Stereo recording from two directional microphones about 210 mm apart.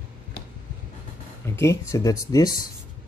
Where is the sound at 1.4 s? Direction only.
10° left (ahead or behind).